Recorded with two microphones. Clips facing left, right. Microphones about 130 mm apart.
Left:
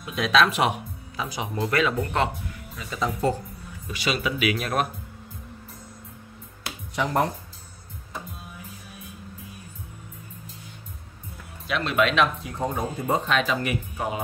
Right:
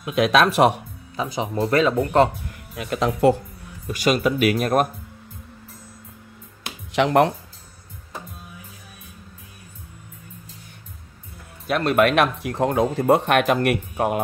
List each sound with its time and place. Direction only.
0.0 s speech: 60° right (ahead or behind)
0.5 s speech: 40° right (ahead or behind)
2.7 s speech: 65° right (ahead or behind)
3.8 s speech: 45° right (ahead or behind)
6.9 s speech: 85° right
11.6 s speech: 50° right (ahead or behind)